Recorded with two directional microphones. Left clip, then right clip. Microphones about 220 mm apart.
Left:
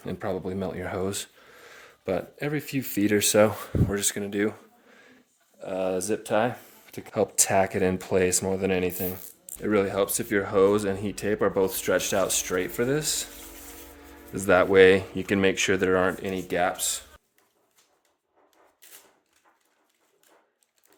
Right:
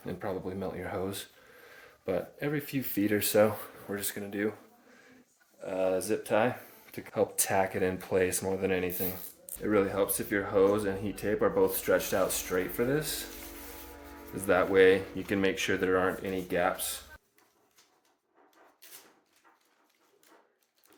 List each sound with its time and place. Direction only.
0.0 s speech: 60° left (ahead or behind)
5.5 s speech: 50° left (ahead or behind)
14.3 s speech: 60° left (ahead or behind)